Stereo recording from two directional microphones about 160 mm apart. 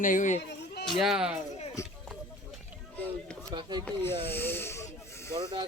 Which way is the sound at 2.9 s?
10° left (ahead or behind).